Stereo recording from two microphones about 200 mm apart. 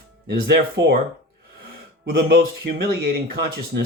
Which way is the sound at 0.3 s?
55° right (ahead or behind).